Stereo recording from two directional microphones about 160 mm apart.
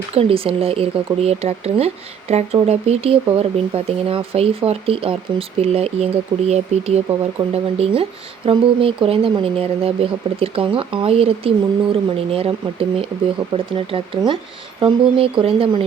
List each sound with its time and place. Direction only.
0.1 s speech: 35° right (ahead or behind)